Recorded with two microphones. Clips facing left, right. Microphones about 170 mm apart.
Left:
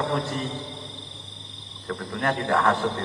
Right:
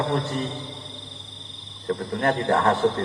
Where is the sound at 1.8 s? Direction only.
35° right (ahead or behind).